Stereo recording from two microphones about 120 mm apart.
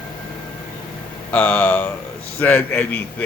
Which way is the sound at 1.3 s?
15° left (ahead or behind).